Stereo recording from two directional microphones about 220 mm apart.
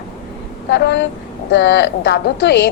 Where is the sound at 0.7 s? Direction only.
50° left (ahead or behind).